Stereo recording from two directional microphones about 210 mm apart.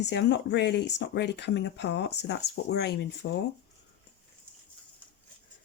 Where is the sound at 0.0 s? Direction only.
55° left (ahead or behind).